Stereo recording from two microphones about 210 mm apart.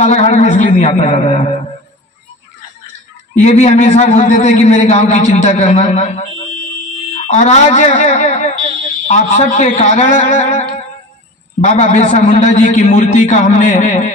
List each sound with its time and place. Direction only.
0.0 s a man's voice: 30° left (ahead or behind)
3.4 s a man's voice: 30° left (ahead or behind)